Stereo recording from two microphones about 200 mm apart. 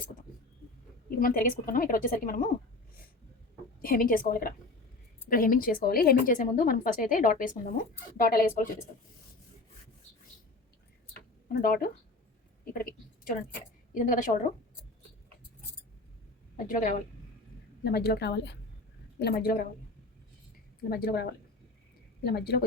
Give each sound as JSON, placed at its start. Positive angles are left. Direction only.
{"t": 1.2, "sound": "speech", "side_deg": 45}
{"t": 3.8, "sound": "speech", "side_deg": 45}
{"t": 11.4, "sound": "a woman's voice", "side_deg": 45}
{"t": 16.6, "sound": "a woman's voice", "side_deg": 40}
{"t": 17.8, "sound": "a woman's voice", "side_deg": 55}
{"t": 19.2, "sound": "speech", "side_deg": 45}
{"t": 20.9, "sound": "speech", "side_deg": 50}